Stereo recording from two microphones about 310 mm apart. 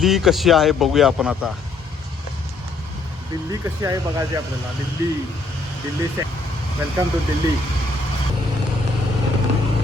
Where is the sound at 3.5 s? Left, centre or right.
Centre.